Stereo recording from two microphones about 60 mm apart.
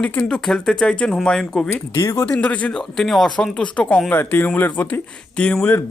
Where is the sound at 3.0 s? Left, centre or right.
Centre.